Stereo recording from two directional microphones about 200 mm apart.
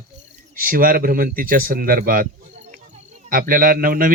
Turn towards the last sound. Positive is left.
turn(degrees=-45)  # may be behind; listen again after turning